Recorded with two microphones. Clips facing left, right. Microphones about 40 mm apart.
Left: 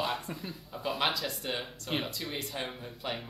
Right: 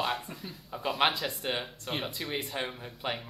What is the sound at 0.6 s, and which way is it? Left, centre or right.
A man's voice, centre.